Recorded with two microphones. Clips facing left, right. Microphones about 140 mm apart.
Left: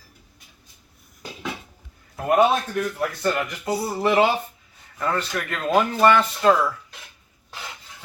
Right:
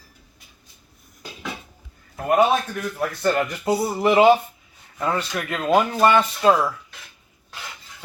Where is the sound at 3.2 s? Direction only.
20° right (ahead or behind).